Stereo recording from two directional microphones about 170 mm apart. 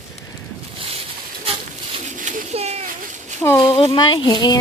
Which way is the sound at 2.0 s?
45° right (ahead or behind).